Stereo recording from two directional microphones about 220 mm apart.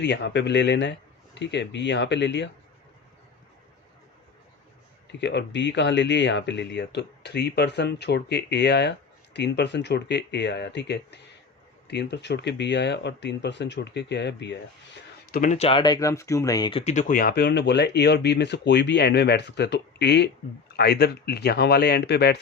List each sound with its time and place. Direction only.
0.0 s speech: 50° left (ahead or behind)
5.0 s speech: 50° left (ahead or behind)
15.3 s speech: 35° left (ahead or behind)